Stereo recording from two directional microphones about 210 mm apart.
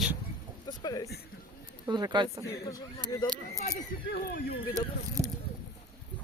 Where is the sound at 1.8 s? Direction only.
20° right (ahead or behind).